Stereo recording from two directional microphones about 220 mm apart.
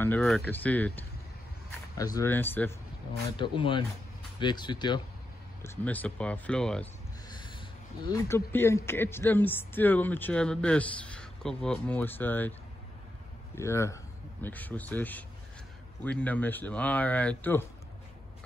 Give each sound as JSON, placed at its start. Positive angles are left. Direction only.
{"t": 0.0, "sound": "speech", "side_deg": 5}
{"t": 3.1, "sound": "speech", "side_deg": 25}
{"t": 5.6, "sound": "speech", "side_deg": 5}
{"t": 7.2, "sound": "snort", "side_deg": 20}
{"t": 8.1, "sound": "speech", "side_deg": 15}
{"t": 13.6, "sound": "speech", "side_deg": 10}